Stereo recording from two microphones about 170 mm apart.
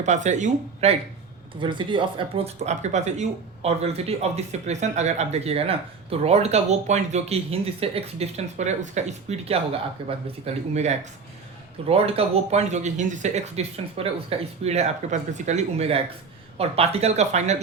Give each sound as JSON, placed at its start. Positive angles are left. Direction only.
{"t": 0.0, "sound": "speech", "side_deg": -45}
{"t": 1.5, "sound": "speech", "side_deg": -30}